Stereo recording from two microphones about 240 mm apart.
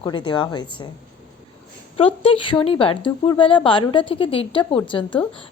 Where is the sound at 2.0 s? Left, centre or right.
Left.